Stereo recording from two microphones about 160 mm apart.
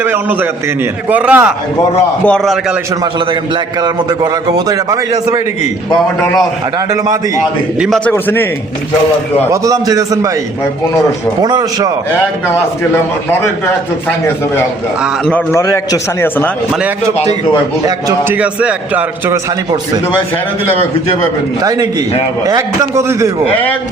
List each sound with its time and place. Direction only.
0.0 s a man's voice: 15° right (ahead or behind)
2.2 s a man's voice: 5° left (ahead or behind)
3.8 s a man's voice: 25° right (ahead or behind)
7.8 s a man's voice: 5° left (ahead or behind)
9.5 s a man's voice: 20° right (ahead or behind)
11.4 s a man's voice: 25° right (ahead or behind)
15.5 s a man's voice: 20° left (ahead or behind)
18.3 s a man's voice: 10° right (ahead or behind)
21.6 s a man's voice: 25° right (ahead or behind)